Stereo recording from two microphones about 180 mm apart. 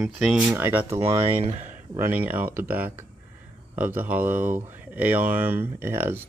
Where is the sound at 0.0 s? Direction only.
5° right (ahead or behind).